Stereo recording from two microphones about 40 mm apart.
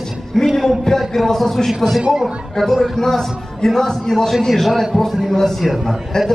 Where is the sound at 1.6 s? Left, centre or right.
Centre.